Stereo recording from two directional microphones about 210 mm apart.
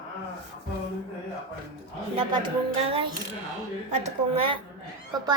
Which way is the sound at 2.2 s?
25° right (ahead or behind).